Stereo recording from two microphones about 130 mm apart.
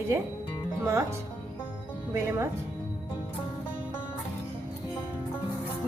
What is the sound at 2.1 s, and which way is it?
Speech, 20° right (ahead or behind).